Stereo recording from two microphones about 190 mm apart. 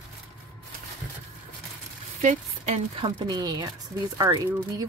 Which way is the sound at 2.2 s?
35° right (ahead or behind).